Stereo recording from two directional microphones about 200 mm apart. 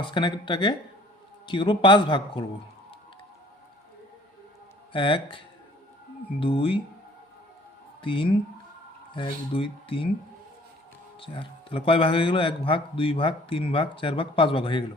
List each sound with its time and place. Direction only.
0.0 s a man's voice: 25° left (ahead or behind)
4.9 s a man's voice: 25° left (ahead or behind)
6.4 s a man's voice: 30° left (ahead or behind)
8.0 s a man's voice: 25° left (ahead or behind)
11.2 s a man's voice: 25° left (ahead or behind)